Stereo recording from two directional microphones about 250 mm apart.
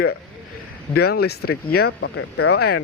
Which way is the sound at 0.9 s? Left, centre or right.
Left.